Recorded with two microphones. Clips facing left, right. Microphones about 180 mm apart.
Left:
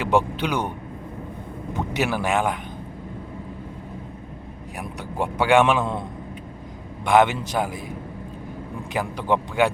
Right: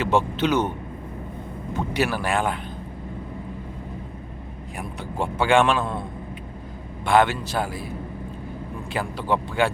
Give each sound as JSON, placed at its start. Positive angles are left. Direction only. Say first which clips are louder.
{"t": 0.0, "sound": "a man's voice", "louder": "even", "side_deg": 15}
{"t": 1.7, "sound": "a man's voice", "louder": "even", "side_deg": 15}
{"t": 4.8, "sound": "a man's voice", "louder": "left 1 dB", "side_deg": 15}